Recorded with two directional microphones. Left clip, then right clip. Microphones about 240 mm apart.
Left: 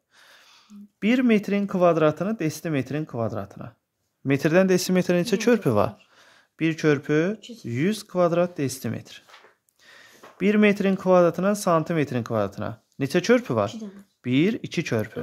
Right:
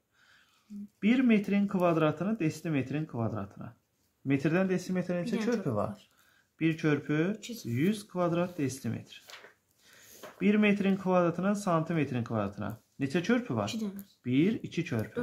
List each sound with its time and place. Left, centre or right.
0.9 s speech: left
7.3 s speech: right
7.7 s speech: left
10.4 s speech: left